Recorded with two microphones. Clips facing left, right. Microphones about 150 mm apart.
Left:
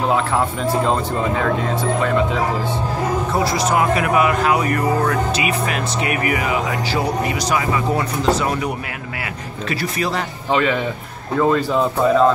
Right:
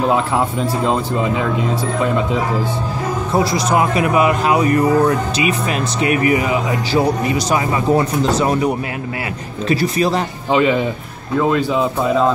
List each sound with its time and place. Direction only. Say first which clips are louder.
0.1 s speech: right 2 dB; 15° right (ahead or behind)
3.4 s speech: right 1 dB; 20° right (ahead or behind)
9.7 s speech: right 6 dB; 25° right (ahead or behind)
11.3 s speech: right 1 dB; 5° right (ahead or behind)